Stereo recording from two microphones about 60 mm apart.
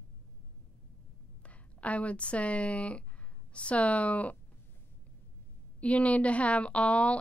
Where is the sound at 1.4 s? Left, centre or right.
Left.